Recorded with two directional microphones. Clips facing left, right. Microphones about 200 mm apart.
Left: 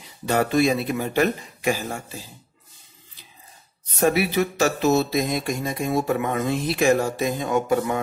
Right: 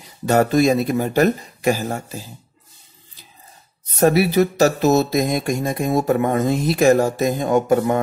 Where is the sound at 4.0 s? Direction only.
40° right (ahead or behind).